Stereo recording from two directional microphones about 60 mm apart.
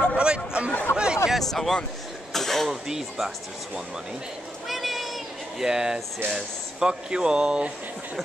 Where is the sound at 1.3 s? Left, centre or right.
Centre.